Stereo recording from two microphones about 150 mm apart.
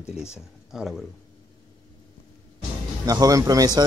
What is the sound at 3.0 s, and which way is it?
Speech, 25° right (ahead or behind).